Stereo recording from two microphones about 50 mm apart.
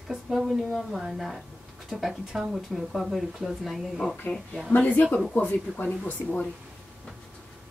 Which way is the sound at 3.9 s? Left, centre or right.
Centre.